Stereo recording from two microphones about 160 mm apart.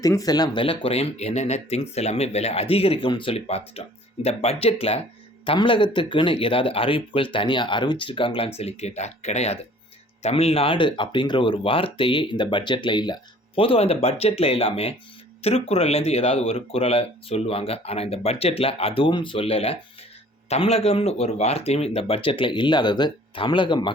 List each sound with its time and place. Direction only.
0.0 s speech: 20° left (ahead or behind)